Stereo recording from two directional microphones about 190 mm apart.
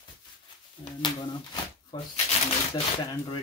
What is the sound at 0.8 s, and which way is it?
Speech, 20° left (ahead or behind).